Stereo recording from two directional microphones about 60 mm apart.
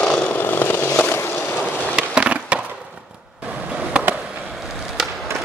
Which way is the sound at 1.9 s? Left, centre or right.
Centre.